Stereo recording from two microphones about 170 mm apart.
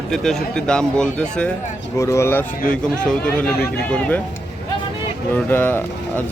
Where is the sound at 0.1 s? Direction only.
5° left (ahead or behind).